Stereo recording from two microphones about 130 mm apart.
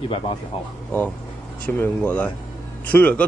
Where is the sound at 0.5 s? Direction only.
45° left (ahead or behind).